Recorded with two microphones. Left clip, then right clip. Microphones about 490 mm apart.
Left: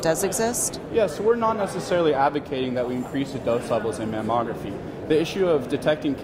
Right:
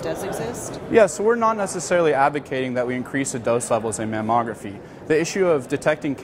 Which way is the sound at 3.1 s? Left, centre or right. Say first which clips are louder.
Right 3 dB; right.